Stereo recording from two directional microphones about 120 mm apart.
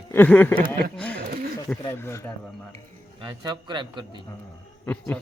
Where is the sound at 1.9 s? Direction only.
20° left (ahead or behind).